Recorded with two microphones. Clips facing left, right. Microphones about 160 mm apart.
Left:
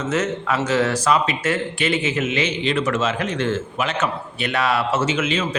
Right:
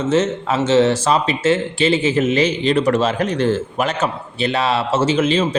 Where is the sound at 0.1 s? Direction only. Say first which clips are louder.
Right 4 dB; 25° right (ahead or behind).